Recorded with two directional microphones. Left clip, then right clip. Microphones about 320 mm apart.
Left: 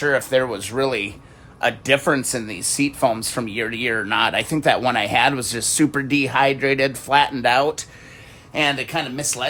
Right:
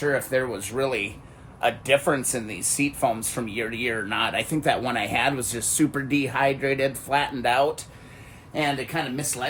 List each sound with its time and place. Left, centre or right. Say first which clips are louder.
0.0 s speech: left 5 dB; centre
8.5 s speech: left 5 dB; centre